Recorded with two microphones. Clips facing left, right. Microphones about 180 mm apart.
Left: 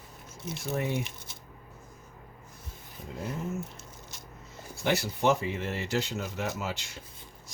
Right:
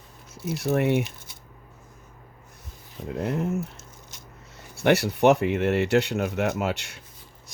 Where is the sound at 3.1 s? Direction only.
65° right (ahead or behind).